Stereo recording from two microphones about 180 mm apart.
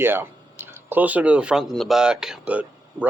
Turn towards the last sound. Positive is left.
turn(degrees=-5)  # may be behind; listen again after turning